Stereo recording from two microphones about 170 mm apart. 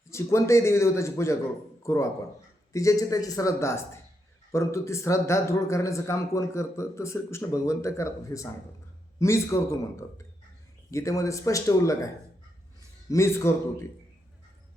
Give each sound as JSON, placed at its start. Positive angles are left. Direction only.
{"t": 0.1, "sound": "a man's voice", "side_deg": 15}
{"t": 10.9, "sound": "a man's voice", "side_deg": 20}